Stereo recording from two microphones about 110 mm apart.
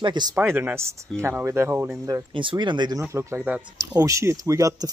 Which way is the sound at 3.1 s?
25° right (ahead or behind).